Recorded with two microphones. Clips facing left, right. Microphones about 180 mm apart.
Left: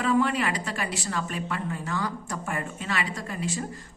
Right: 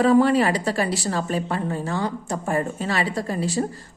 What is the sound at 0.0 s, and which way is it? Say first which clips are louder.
A woman's voice: right 8 dB; 35° right (ahead or behind).